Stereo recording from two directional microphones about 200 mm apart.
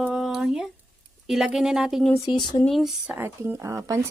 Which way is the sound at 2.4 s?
20° left (ahead or behind).